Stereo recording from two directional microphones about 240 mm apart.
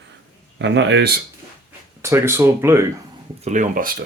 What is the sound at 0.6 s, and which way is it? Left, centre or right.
Speech, right.